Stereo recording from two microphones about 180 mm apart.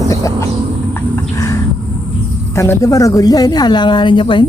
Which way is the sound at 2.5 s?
15° left (ahead or behind).